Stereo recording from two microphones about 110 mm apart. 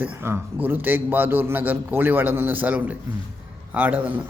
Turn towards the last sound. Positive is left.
turn(degrees=-15)  # may be behind; listen again after turning